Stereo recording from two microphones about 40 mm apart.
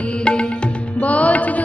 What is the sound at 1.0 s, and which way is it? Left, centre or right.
Music, left.